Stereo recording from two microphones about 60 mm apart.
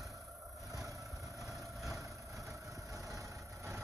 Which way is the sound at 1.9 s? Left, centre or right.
Right.